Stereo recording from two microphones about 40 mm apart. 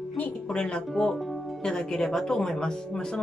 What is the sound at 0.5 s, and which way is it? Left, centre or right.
Speech, left.